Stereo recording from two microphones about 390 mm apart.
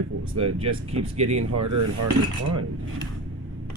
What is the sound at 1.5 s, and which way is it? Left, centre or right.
Cutlery, right.